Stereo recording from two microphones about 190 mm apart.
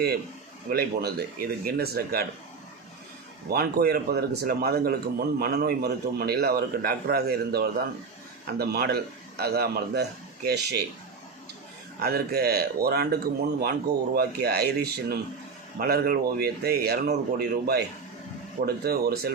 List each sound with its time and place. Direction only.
0.7 s a man's voice: 55° right (ahead or behind)
3.5 s a man's voice: 55° right (ahead or behind)
11.9 s a man's voice: 55° right (ahead or behind)